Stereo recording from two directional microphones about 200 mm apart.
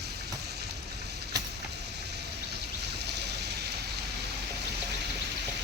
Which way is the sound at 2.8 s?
55° right (ahead or behind).